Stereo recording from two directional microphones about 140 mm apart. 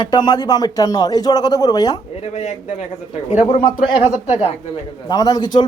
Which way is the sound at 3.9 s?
40° left (ahead or behind).